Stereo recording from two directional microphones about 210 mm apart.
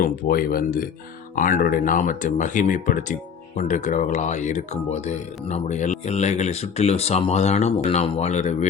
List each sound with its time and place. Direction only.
0.0 s speech: 45° left (ahead or behind)